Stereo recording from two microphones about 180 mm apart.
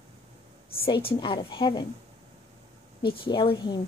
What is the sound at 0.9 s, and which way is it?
A woman's voice, 30° left (ahead or behind).